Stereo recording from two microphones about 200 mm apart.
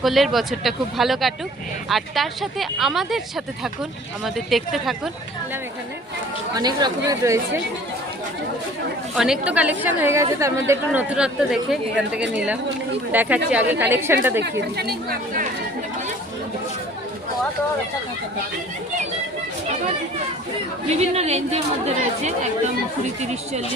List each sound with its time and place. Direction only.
0.0 s speech: centre (ahead or behind)
6.5 s speech: 20° right (ahead or behind)
9.1 s a woman's voice: 5° right (ahead or behind)
20.8 s a woman's voice: 30° right (ahead or behind)